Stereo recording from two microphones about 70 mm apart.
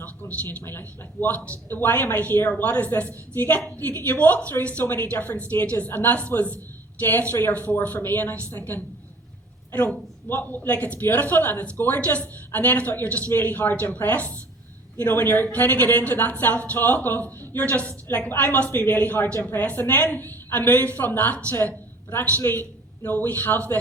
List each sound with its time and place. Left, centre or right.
0.2 s a sound: left
0.6 s a man's voice: left
10.7 s a woman's voice: centre